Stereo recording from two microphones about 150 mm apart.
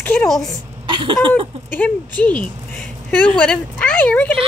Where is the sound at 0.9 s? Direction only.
35° right (ahead or behind).